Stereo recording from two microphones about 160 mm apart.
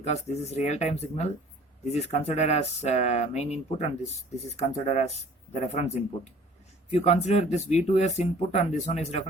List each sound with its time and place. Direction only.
0.0 s speech: 45° left (ahead or behind)